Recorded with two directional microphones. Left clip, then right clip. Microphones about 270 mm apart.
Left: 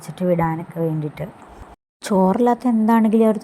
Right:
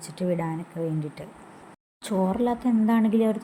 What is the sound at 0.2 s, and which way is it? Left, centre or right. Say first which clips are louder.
Speech: left 8 dB; centre.